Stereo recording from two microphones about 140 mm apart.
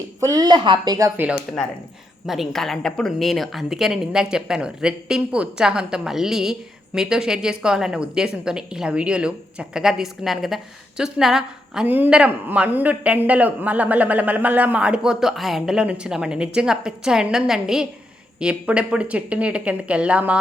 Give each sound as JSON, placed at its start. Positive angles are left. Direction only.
{"t": 0.2, "sound": "a woman's voice", "side_deg": -25}
{"t": 2.2, "sound": "a woman's voice", "side_deg": 0}